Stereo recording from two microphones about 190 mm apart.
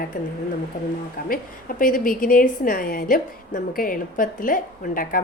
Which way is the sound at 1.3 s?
45° left (ahead or behind).